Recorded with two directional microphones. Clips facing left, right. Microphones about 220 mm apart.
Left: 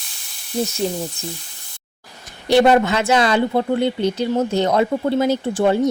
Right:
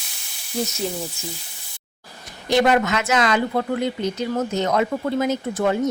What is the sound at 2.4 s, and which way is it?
Speech, 30° left (ahead or behind).